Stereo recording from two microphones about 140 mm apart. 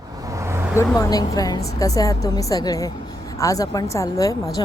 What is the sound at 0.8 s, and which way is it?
Speech, 25° left (ahead or behind).